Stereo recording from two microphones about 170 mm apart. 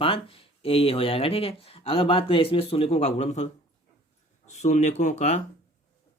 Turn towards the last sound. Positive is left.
turn(degrees=45)  # may be behind; listen again after turning